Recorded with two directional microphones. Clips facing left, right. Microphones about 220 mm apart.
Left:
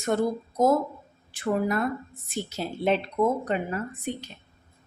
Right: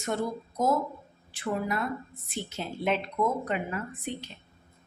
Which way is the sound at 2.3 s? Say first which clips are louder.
Left 4 dB; 40° left (ahead or behind).